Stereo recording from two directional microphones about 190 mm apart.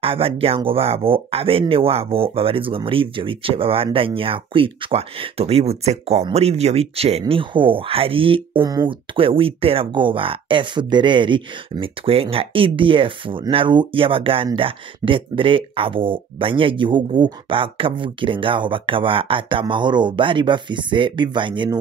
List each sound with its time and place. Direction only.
0.0 s speech: 30° right (ahead or behind)